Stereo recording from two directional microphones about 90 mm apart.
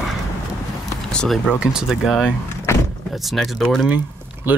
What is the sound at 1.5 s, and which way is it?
Speech, 5° right (ahead or behind).